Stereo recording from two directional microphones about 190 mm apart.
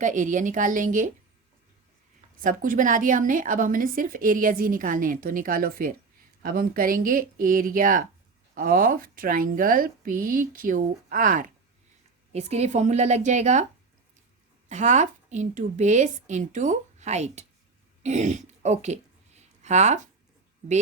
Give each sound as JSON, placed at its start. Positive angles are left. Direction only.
{"t": 0.0, "sound": "a woman's voice", "side_deg": -40}
{"t": 2.4, "sound": "a woman's voice", "side_deg": -45}
{"t": 12.3, "sound": "a woman's voice", "side_deg": -35}
{"t": 14.7, "sound": "a woman's voice", "side_deg": -40}
{"t": 18.0, "sound": "a sound", "side_deg": -35}